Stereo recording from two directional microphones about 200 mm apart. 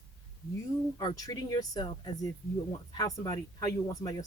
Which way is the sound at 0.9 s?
20° left (ahead or behind).